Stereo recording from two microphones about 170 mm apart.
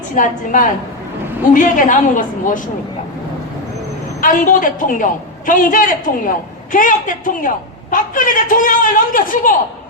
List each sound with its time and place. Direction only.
0.2 s a man's voice: 50° left (ahead or behind)
4.2 s a man's voice: 55° left (ahead or behind)